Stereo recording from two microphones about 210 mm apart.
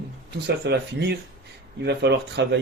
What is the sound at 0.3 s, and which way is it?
Speech, 55° right (ahead or behind).